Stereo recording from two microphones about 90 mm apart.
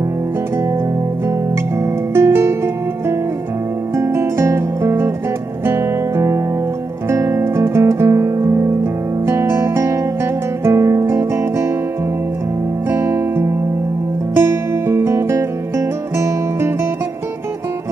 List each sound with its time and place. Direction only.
2.1 s music: 25° right (ahead or behind)
3.9 s guitar: 30° right (ahead or behind)
5.7 s music: 25° right (ahead or behind)
7.1 s guitar: 30° right (ahead or behind)
10.6 s music: 30° right (ahead or behind)
12.9 s music: 30° right (ahead or behind)